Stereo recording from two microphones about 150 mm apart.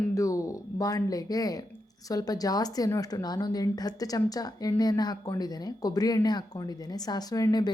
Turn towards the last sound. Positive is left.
turn(degrees=25)  # may be behind; listen again after turning